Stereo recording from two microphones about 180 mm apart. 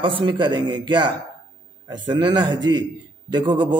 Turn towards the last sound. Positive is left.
turn(degrees=-25)  # may be behind; listen again after turning